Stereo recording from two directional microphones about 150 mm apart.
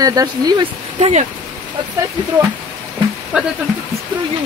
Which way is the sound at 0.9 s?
45° right (ahead or behind).